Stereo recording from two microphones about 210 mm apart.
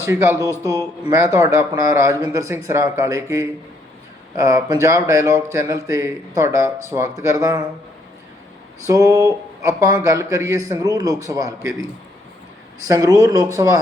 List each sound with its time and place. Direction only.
0.0 s a man's voice: 15° right (ahead or behind)
8.9 s a man's voice: 15° right (ahead or behind)
12.9 s a man's voice: 15° right (ahead or behind)